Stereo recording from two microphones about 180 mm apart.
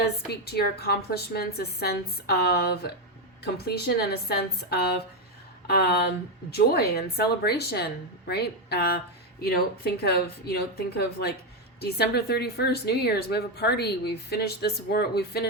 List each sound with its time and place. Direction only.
0.0 s a woman's voice: 65° left (ahead or behind)